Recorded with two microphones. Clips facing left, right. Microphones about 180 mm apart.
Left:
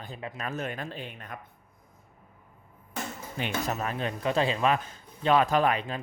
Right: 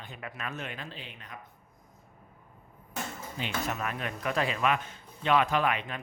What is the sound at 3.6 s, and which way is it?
A man's voice, 35° left (ahead or behind).